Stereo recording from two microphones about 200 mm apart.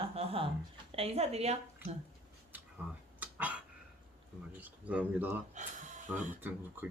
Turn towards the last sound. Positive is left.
turn(degrees=-10)  # may be behind; listen again after turning